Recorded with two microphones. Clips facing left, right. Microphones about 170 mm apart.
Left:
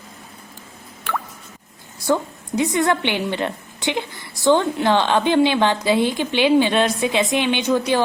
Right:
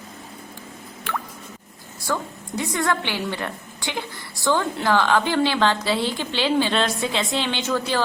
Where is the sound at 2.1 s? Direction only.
20° left (ahead or behind).